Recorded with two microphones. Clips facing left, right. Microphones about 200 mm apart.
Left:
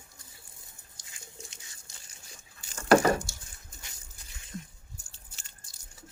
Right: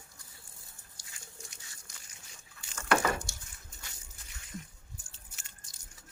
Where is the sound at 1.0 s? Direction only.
20° left (ahead or behind).